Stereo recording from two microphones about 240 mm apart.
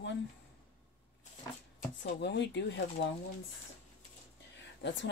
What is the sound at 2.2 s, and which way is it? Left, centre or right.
Speech, left.